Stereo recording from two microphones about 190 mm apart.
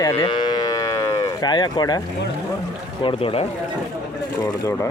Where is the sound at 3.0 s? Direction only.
25° left (ahead or behind).